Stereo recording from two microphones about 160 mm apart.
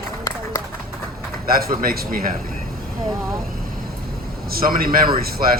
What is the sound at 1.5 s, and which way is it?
Speech, 65° right (ahead or behind).